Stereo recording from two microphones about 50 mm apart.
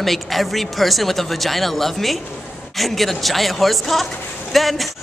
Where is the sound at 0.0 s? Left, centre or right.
Centre.